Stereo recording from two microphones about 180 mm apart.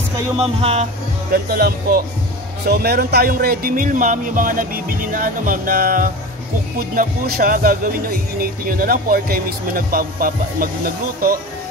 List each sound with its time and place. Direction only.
0.4 s speech: 35° right (ahead or behind)
1.3 s speech: 55° right (ahead or behind)